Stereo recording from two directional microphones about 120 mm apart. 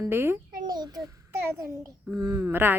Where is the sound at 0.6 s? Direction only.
35° right (ahead or behind).